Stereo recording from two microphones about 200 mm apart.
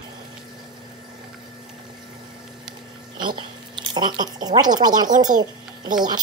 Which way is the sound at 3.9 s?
20° right (ahead or behind).